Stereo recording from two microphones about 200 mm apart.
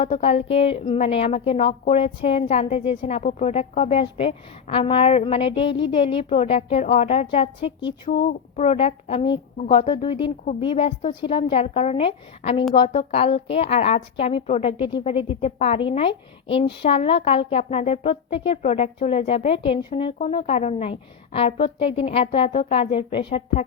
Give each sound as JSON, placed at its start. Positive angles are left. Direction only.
{"t": 0.0, "sound": "speech", "side_deg": 30}
{"t": 8.0, "sound": "speech", "side_deg": 45}
{"t": 8.5, "sound": "speech", "side_deg": 30}